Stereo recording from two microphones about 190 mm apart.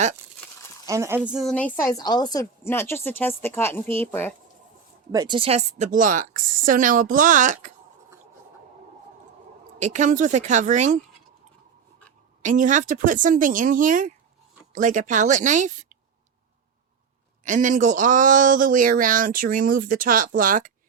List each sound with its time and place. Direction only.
0.9 s a woman's voice: 15° right (ahead or behind); by 1.7 s 5° left (ahead or behind)
1.7 s a woman's voice: 20° left (ahead or behind)
5.1 s speech: 20° right (ahead or behind); by 7.7 s 40° right (ahead or behind)
9.7 s speech: 40° right (ahead or behind)
12.4 s speech: 40° right (ahead or behind)
17.4 s speech: 40° right (ahead or behind)